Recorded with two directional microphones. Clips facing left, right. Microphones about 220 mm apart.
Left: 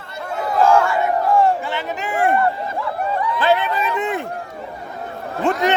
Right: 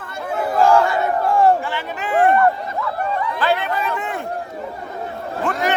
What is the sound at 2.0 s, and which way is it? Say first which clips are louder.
Run: right 4 dB; 10° left (ahead or behind).